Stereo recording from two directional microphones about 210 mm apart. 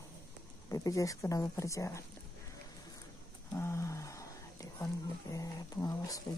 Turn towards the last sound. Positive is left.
turn(degrees=15)  # may be behind; listen again after turning